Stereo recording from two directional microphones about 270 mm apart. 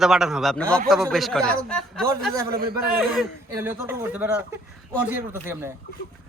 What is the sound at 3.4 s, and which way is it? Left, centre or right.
Speech, centre.